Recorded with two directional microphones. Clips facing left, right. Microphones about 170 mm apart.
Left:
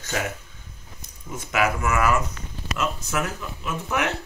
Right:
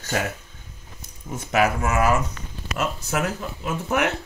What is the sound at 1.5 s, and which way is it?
Speech, 35° right (ahead or behind).